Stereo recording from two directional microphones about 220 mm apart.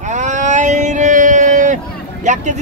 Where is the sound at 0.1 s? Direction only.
35° right (ahead or behind).